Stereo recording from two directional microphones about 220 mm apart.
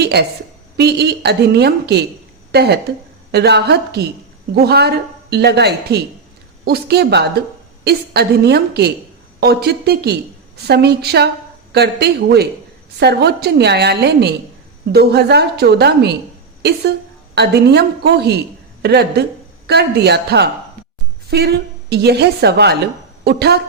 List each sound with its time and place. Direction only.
0.0 s a woman's voice: 50° right (ahead or behind)
17.3 s a woman's voice: 50° right (ahead or behind)